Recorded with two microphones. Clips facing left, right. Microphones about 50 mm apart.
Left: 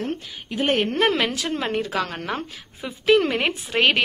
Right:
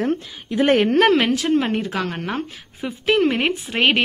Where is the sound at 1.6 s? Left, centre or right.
Right.